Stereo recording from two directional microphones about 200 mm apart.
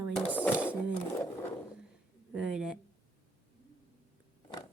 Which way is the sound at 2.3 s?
5° right (ahead or behind).